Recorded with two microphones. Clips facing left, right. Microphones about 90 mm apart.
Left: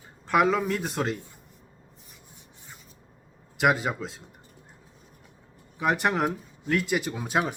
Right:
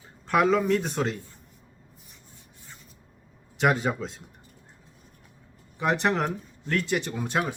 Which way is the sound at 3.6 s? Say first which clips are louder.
Even; 5° left (ahead or behind).